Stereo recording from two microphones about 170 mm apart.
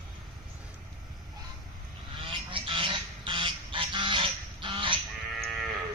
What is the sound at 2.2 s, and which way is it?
Goose, 30° right (ahead or behind).